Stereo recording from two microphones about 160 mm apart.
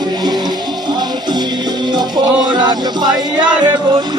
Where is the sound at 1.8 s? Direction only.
25° right (ahead or behind).